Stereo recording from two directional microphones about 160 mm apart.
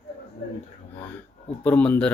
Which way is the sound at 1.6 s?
10° left (ahead or behind).